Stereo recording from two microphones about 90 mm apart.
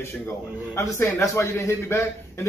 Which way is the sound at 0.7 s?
30° left (ahead or behind).